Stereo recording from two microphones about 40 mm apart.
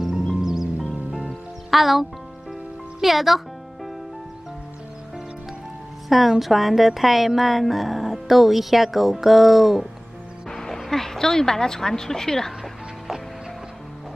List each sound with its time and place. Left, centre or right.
0.4 s music: centre
1.7 s speech: centre
3.0 s music: centre
6.0 s a woman's voice: centre
10.5 s a woman's voice: centre